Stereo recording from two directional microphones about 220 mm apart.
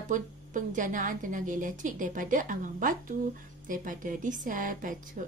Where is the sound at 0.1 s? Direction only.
35° right (ahead or behind).